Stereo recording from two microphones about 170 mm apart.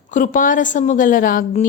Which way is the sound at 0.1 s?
50° left (ahead or behind).